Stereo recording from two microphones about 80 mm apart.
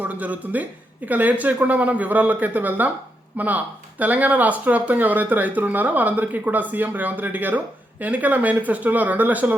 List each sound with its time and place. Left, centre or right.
0.0 s speech: centre